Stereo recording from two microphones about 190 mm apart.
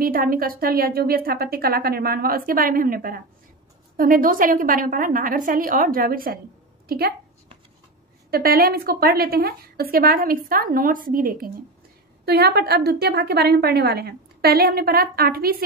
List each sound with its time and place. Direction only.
0.0 s a woman's voice: 50° right (ahead or behind)
8.3 s a woman's voice: 50° right (ahead or behind)